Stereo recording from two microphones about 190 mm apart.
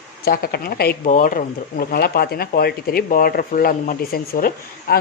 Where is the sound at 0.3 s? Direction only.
55° left (ahead or behind).